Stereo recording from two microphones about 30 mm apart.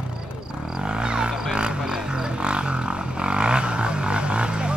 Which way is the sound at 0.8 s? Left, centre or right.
Right.